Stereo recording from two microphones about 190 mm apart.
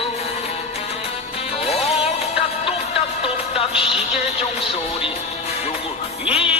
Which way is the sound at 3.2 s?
30° left (ahead or behind).